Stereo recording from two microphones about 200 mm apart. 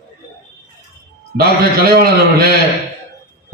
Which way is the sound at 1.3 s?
50° right (ahead or behind).